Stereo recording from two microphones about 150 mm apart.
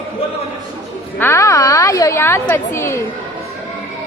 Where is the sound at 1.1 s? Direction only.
15° left (ahead or behind).